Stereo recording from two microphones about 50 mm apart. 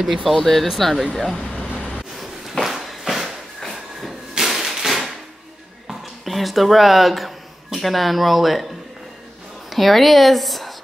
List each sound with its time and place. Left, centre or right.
0.0 s speech: centre
1.4 s vehicle: left
2.5 s a sound: centre
5.9 s speech: centre
9.7 s a woman's voice: centre